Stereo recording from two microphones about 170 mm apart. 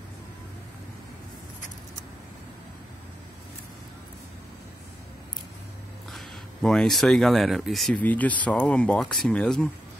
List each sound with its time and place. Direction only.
6.1 s speech: 5° left (ahead or behind)